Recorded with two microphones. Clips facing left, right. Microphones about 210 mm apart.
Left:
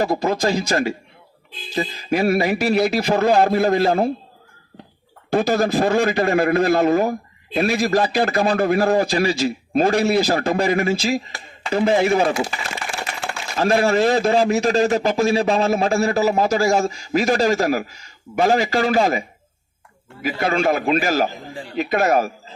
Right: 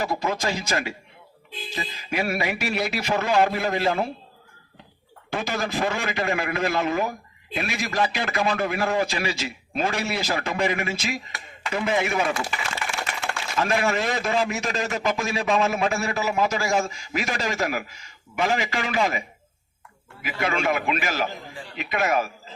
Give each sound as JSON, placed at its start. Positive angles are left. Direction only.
{"t": 0.0, "sound": "a man's voice", "side_deg": 35}
{"t": 5.3, "sound": "a man's voice", "side_deg": 35}
{"t": 20.2, "sound": "a man's voice", "side_deg": 35}